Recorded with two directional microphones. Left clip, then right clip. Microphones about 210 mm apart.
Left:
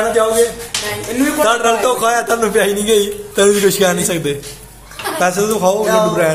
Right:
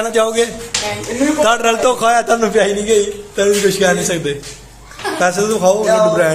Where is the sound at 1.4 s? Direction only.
40° right (ahead or behind).